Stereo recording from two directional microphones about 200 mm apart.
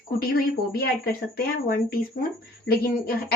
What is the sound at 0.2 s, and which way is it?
A woman's voice, 50° left (ahead or behind).